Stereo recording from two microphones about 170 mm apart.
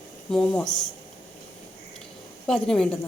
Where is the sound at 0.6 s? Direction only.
25° left (ahead or behind).